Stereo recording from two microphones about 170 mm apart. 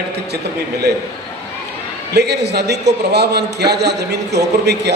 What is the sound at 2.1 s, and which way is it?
A man's voice, 75° right (ahead or behind).